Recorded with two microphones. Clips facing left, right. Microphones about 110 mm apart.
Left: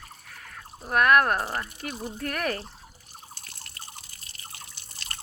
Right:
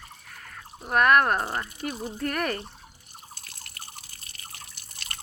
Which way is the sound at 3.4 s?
35° left (ahead or behind).